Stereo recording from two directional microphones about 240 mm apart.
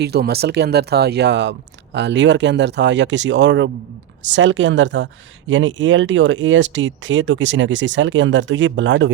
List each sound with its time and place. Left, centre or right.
0.0 s speech: right